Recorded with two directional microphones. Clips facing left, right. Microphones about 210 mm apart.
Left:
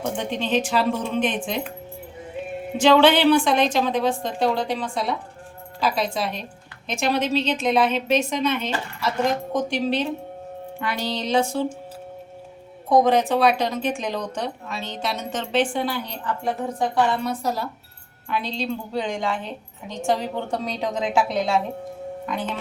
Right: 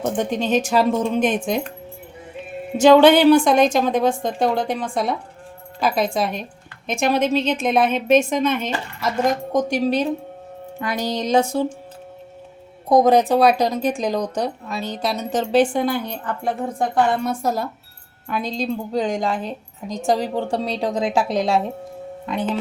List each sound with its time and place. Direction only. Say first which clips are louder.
0.2 s a woman's voice: right 4 dB; 45° right (ahead or behind)
2.7 s a woman's voice: right 5 dB; 45° right (ahead or behind)
12.9 s a woman's voice: right 3 dB; 40° right (ahead or behind)